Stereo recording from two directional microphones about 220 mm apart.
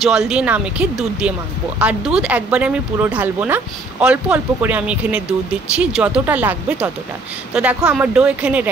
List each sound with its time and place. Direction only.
0.0 s speech: centre (ahead or behind)